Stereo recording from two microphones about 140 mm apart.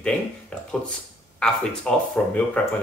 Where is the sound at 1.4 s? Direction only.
5° left (ahead or behind).